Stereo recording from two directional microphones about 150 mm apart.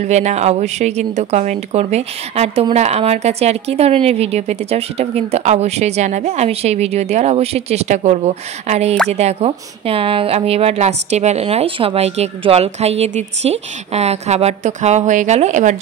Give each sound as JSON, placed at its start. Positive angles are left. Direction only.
{"t": 0.0, "sound": "a woman's voice", "side_deg": -50}